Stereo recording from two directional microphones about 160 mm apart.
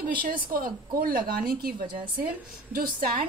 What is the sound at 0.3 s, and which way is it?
A woman's voice, 60° right (ahead or behind).